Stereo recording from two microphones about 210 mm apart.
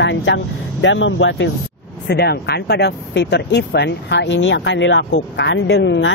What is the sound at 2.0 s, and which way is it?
Speech, 50° left (ahead or behind).